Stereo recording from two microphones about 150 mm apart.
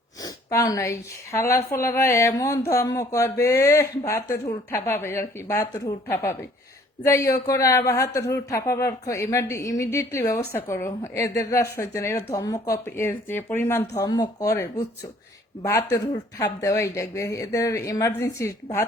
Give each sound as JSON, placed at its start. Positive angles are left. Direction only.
{"t": 0.2, "sound": "a woman's voice", "side_deg": 25}